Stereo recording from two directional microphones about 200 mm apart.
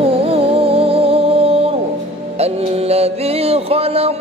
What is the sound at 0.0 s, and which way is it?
Music, 30° right (ahead or behind).